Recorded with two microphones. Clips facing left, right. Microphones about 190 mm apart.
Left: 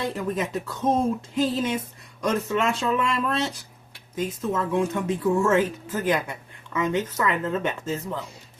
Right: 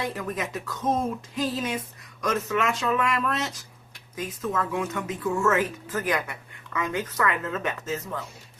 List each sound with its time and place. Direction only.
0.0 s speech: 30° left (ahead or behind)